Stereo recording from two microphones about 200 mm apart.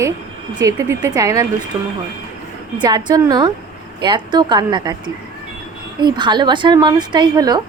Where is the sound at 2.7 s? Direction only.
20° right (ahead or behind).